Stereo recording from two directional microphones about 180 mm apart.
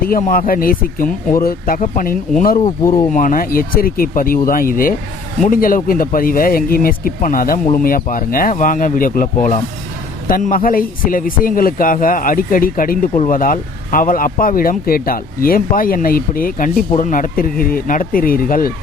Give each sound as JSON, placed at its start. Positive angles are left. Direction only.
{"t": 0.0, "sound": "speech", "side_deg": 50}